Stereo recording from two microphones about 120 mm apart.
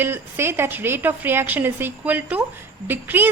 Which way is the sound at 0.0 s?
20° right (ahead or behind).